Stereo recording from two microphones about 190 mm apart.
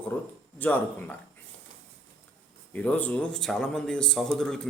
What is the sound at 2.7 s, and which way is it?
A man's voice, 5° left (ahead or behind).